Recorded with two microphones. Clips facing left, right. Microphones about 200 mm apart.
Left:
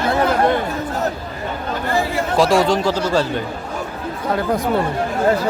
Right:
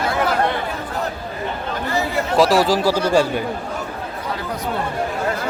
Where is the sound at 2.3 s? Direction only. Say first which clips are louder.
Even; centre (ahead or behind).